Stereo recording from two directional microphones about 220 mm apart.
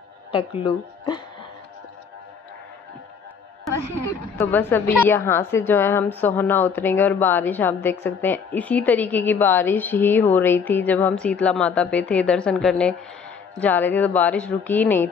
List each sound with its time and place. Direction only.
0.3 s speech: 25° left (ahead or behind)
4.4 s a woman's voice: 10° left (ahead or behind)